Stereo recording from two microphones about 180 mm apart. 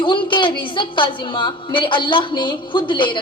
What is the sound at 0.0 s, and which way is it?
A woman's voice, 25° left (ahead or behind).